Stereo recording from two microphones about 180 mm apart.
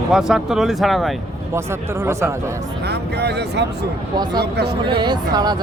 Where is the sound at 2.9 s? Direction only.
65° right (ahead or behind).